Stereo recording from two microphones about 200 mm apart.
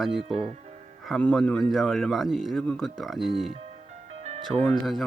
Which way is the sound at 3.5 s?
35° right (ahead or behind).